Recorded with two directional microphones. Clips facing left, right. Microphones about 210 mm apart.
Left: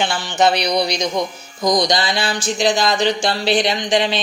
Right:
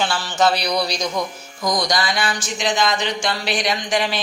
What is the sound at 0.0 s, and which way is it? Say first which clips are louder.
Speech: left 2 dB; 20° left (ahead or behind).